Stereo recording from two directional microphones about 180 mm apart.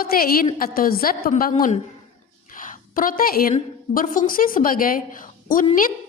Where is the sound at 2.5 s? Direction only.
50° left (ahead or behind).